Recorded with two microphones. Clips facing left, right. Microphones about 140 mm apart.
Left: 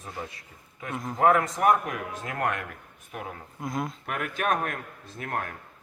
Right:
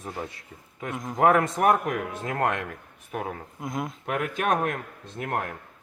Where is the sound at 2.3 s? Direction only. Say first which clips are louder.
Right 3 dB; 30° right (ahead or behind).